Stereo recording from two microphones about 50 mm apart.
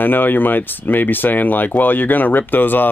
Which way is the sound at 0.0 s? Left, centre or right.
Left.